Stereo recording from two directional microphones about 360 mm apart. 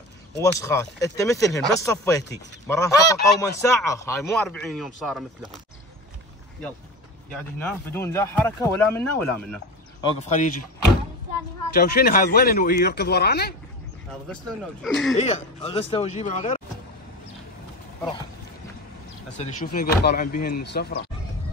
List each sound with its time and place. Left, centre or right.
0.4 s a man's voice: centre
7.5 s speech: centre
10.0 s speech: centre
11.7 s speech: left
14.3 s a man's voice: centre
15.1 s speech: centre
19.3 s speech: left